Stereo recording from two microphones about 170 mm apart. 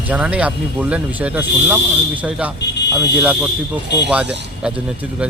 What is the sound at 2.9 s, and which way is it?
Speech, 5° right (ahead or behind).